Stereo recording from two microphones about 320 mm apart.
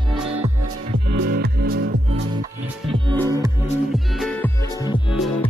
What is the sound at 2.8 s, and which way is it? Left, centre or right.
Music, centre.